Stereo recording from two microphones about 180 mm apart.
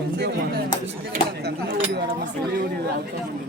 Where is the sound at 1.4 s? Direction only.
65° right (ahead or behind).